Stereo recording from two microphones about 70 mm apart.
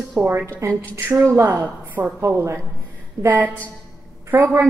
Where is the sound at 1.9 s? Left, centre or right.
Right.